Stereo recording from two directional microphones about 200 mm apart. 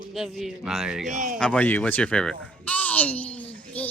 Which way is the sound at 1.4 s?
5° left (ahead or behind).